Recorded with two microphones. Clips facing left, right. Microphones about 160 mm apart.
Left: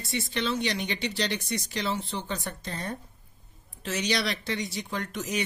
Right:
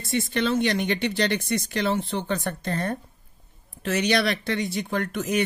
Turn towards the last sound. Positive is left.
turn(degrees=-55)  # may be behind; listen again after turning